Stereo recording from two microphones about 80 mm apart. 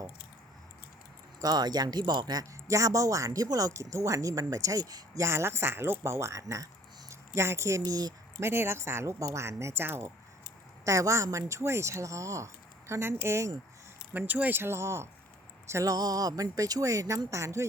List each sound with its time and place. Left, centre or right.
1.4 s speech: right
7.9 s speech: right
8.4 s speech: right
10.8 s speech: right
14.1 s speech: right